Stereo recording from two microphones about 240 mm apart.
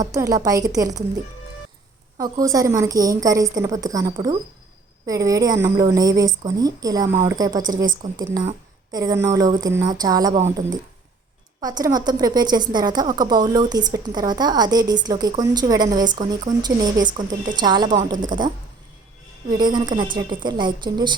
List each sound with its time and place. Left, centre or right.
0.0 s speech: centre
2.4 s speech: centre
11.6 s speech: centre
19.5 s a woman's voice: centre